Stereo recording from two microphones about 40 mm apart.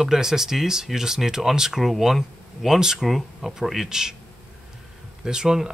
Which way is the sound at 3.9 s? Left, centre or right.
Centre.